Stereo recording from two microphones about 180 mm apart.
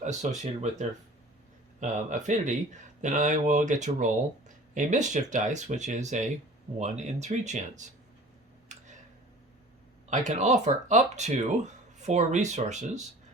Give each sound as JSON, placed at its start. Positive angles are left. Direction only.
{"t": 0.0, "sound": "speech", "side_deg": -40}
{"t": 8.7, "sound": "tick", "side_deg": -40}
{"t": 10.1, "sound": "speech", "side_deg": -40}